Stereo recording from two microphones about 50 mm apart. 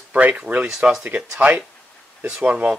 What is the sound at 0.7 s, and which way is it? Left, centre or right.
Speech, centre.